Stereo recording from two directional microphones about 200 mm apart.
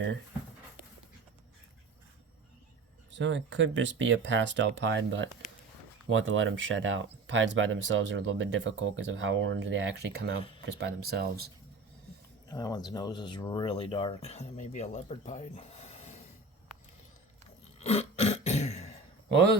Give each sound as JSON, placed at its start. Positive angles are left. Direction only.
{"t": 3.1, "sound": "speech", "side_deg": -65}
{"t": 6.1, "sound": "speech", "side_deg": -75}
{"t": 12.5, "sound": "speech", "side_deg": 20}
{"t": 17.7, "sound": "throat clearing", "side_deg": 30}
{"t": 19.3, "sound": "speech", "side_deg": -60}